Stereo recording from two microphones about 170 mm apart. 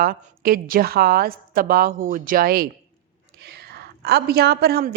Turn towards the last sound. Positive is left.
turn(degrees=-70)  # may be behind; listen again after turning